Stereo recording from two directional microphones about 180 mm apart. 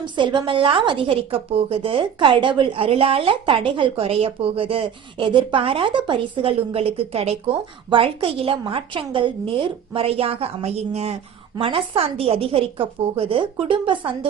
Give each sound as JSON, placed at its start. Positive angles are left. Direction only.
{"t": 0.0, "sound": "a woman's voice", "side_deg": -25}